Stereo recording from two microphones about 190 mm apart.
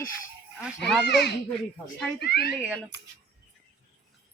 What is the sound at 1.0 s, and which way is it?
Speech, 60° left (ahead or behind).